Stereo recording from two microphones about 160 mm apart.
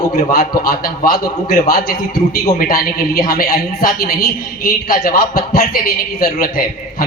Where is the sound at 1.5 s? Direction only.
65° left (ahead or behind).